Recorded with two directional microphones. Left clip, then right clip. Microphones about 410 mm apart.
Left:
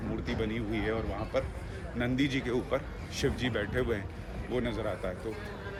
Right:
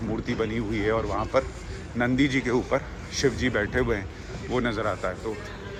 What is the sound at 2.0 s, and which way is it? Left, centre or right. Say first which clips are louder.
Speech: right 7 dB; centre.